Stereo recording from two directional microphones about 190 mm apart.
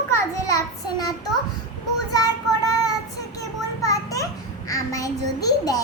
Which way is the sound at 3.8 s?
20° left (ahead or behind).